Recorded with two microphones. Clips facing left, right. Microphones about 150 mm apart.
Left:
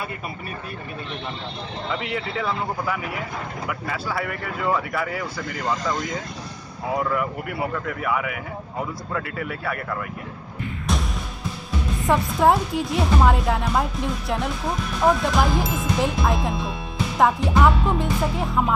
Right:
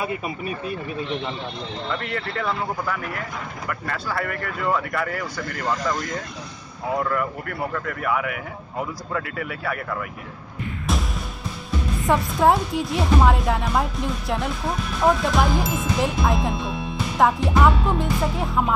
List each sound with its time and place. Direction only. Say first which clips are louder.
1.9 s speech: left 2 dB; 5° left (ahead or behind)
12.1 s speech: even; centre (ahead or behind)